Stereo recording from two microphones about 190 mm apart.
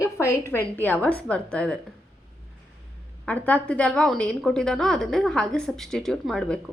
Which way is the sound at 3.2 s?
10° left (ahead or behind).